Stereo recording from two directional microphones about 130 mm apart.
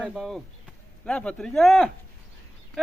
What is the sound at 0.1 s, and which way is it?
Speech, centre (ahead or behind).